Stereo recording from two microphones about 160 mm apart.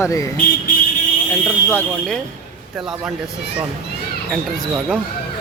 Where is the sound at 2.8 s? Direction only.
5° right (ahead or behind).